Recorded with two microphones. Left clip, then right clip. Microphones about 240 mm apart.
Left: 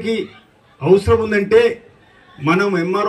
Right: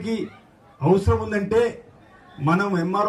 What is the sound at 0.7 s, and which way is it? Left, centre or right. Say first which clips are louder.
A man's voice: left 7 dB; right.